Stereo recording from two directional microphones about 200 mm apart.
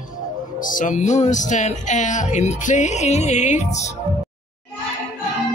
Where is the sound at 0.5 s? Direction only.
40° left (ahead or behind).